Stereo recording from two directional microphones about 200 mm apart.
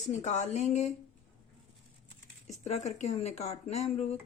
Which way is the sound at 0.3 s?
35° left (ahead or behind).